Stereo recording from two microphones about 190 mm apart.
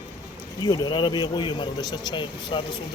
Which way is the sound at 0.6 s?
20° left (ahead or behind).